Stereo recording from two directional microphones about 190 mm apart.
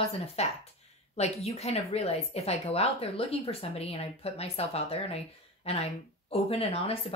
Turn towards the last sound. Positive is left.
turn(degrees=30)  # may be behind; listen again after turning